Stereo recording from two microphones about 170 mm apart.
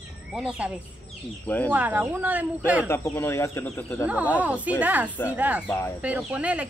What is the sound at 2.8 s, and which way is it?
Speech, 15° left (ahead or behind).